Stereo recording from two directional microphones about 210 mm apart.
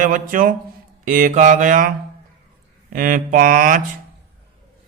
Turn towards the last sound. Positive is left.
turn(degrees=-40)  # may be behind; listen again after turning